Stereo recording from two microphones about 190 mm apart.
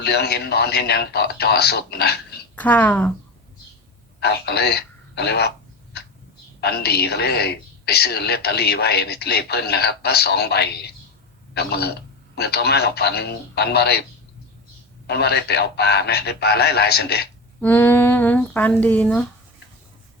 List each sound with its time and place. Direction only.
0.0 s a woman's voice: 60° left (ahead or behind)
2.6 s speech: 10° left (ahead or behind)
4.2 s a woman's voice: 60° left (ahead or behind)
15.0 s a woman's voice: 60° left (ahead or behind)
17.6 s speech: 10° left (ahead or behind)